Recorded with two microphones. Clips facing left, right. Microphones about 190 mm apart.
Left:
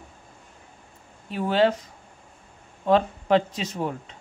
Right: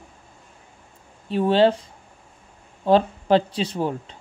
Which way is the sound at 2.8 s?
30° right (ahead or behind).